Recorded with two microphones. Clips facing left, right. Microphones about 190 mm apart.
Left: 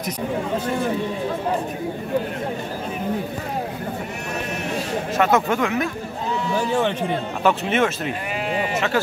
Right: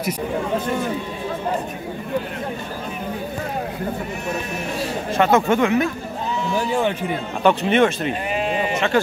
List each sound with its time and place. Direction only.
5.1 s speech: centre (ahead or behind)
7.4 s speech: centre (ahead or behind)
8.4 s sheep: 20° right (ahead or behind)
8.7 s speech: 5° left (ahead or behind)